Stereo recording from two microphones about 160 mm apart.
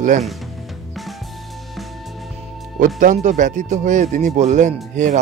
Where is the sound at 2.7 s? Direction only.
55° right (ahead or behind).